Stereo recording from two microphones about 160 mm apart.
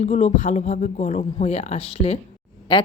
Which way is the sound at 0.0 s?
45° left (ahead or behind).